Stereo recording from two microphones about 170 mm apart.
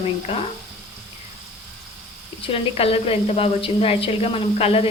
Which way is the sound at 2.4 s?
35° left (ahead or behind).